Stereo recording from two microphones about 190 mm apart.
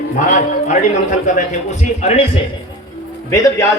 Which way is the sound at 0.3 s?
40° left (ahead or behind).